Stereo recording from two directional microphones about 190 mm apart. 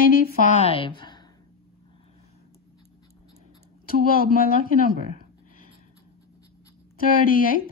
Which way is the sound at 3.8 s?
50° left (ahead or behind).